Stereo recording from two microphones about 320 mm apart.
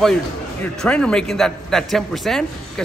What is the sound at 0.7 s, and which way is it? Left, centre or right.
A man's voice, centre.